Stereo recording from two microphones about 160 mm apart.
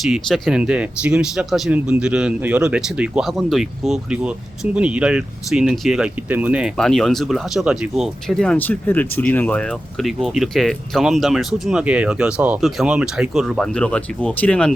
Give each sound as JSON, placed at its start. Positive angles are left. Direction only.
{"t": 0.0, "sound": "speech", "side_deg": 0}
{"t": 6.7, "sound": "speech", "side_deg": 0}